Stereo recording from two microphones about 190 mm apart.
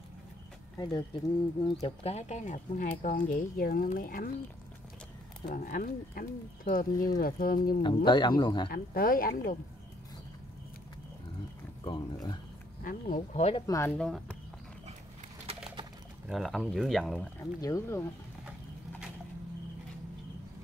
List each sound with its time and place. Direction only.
0.7 s speech: 20° left (ahead or behind)
2.0 s speech: 35° left (ahead or behind)
5.5 s speech: 45° left (ahead or behind)
6.9 s speech: 20° left (ahead or behind)
7.2 s speech: 50° left (ahead or behind)
7.8 s speech: 25° left (ahead or behind)
8.6 s speech: 50° left (ahead or behind)
11.8 s a sound: 25° left (ahead or behind)
12.8 s speech: 40° left (ahead or behind)
13.7 s speech: 15° left (ahead or behind)
13.9 s speech: 5° left (ahead or behind)
15.4 s bird: 25° right (ahead or behind)
16.3 s speech: centre (ahead or behind)
17.4 s speech: 15° left (ahead or behind)